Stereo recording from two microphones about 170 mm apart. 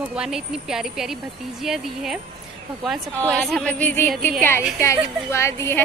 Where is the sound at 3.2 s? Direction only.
5° left (ahead or behind).